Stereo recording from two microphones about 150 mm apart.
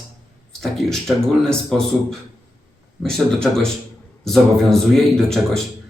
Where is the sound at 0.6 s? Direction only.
5° left (ahead or behind).